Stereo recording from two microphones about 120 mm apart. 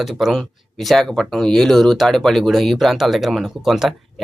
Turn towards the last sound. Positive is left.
turn(degrees=0)  # may be behind; listen again after turning